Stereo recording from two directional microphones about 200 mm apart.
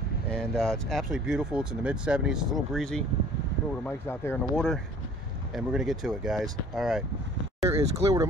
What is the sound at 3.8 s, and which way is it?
Speech, 10° left (ahead or behind).